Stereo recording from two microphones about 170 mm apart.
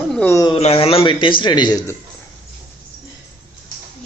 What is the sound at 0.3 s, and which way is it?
Speech, 20° left (ahead or behind).